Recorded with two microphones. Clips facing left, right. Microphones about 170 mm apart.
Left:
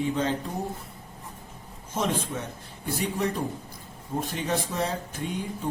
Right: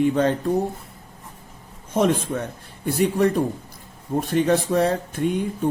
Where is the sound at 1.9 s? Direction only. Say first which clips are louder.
Right 8 dB; 55° right (ahead or behind).